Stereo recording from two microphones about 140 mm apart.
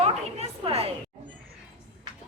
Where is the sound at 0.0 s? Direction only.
45° right (ahead or behind).